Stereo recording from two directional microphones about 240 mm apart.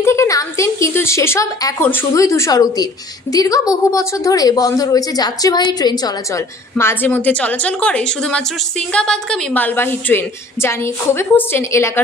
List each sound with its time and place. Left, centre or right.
0.0 s speech: centre